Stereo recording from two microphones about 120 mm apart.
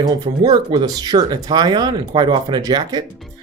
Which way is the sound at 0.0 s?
35° right (ahead or behind).